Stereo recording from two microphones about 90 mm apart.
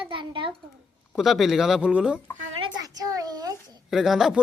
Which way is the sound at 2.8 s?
45° right (ahead or behind).